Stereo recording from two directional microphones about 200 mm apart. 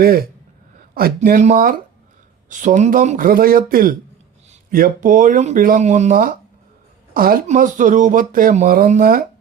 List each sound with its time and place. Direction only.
0.0 s speech: 50° right (ahead or behind)